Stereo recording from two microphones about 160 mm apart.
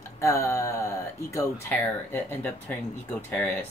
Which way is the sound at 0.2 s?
20° left (ahead or behind).